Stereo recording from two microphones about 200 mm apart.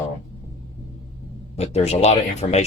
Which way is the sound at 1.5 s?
30° left (ahead or behind).